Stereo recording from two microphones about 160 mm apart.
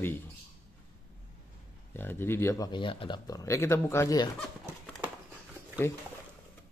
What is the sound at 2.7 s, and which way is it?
Speech, 30° left (ahead or behind).